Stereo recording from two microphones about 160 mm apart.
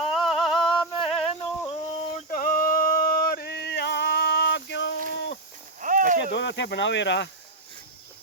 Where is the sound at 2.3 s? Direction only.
60° left (ahead or behind); by 5.0 s 90° left.